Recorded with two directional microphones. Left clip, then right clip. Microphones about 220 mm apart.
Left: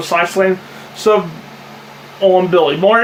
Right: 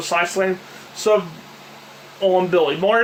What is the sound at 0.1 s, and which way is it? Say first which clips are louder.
Speech: left 6 dB; 15° right (ahead or behind).